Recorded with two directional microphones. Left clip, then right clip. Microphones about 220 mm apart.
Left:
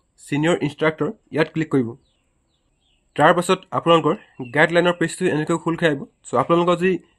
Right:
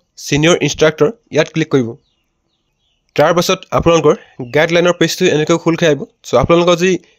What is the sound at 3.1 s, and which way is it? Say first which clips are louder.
Speech: right 4 dB; 35° right (ahead or behind).